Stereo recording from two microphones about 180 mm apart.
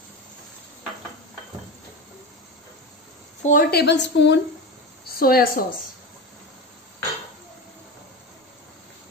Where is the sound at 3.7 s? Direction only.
65° left (ahead or behind).